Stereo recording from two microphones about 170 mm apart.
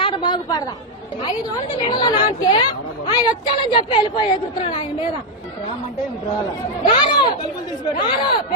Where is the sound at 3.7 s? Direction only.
30° left (ahead or behind).